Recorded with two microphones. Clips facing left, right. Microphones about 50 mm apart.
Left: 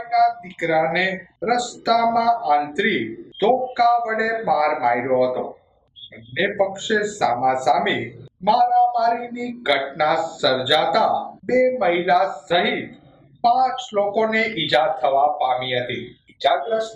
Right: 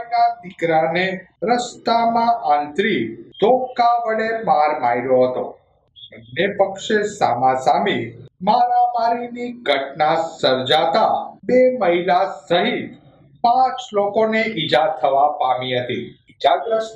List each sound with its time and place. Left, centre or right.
0.3 s speech: left
0.6 s a man's voice: centre
4.4 s speech: centre
10.2 s a man's voice: centre
10.7 s speech: centre
13.6 s speech: centre
14.1 s speech: centre
16.6 s speech: centre